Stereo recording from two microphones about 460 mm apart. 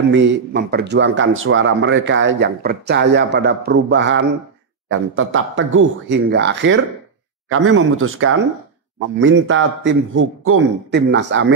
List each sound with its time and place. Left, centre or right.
0.1 s speech: right